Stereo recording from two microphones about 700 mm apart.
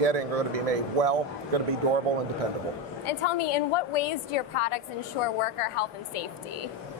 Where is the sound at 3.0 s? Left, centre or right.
Left.